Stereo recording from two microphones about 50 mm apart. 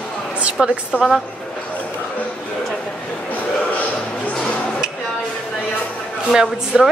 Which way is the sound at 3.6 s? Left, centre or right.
Left.